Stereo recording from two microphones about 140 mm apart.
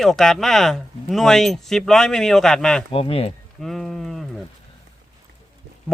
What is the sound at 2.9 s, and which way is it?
Speech, 40° left (ahead or behind).